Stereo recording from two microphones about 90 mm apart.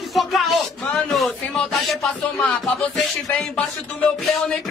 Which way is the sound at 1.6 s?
5° left (ahead or behind).